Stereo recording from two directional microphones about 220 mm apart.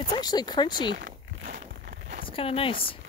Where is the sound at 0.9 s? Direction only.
45° right (ahead or behind).